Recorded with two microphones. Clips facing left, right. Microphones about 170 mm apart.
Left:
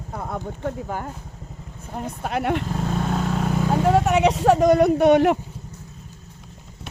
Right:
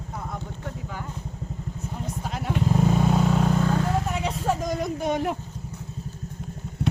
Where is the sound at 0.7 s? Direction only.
50° left (ahead or behind).